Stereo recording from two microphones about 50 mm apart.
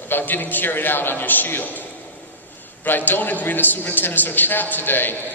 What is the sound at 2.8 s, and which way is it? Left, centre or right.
A man's voice, left.